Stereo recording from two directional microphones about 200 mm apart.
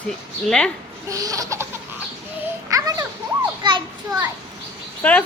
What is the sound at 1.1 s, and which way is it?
Laughter, 15° right (ahead or behind).